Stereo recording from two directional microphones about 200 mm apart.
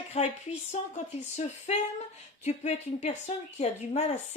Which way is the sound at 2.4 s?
35° left (ahead or behind).